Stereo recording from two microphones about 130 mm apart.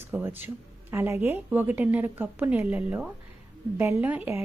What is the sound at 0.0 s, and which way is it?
A woman's voice, 15° right (ahead or behind).